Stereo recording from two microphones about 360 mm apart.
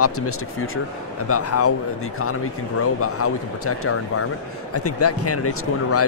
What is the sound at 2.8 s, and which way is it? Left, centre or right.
Speech, left.